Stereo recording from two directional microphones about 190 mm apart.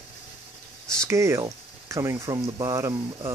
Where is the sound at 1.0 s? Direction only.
15° right (ahead or behind).